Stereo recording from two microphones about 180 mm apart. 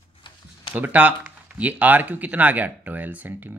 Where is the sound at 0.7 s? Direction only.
10° right (ahead or behind).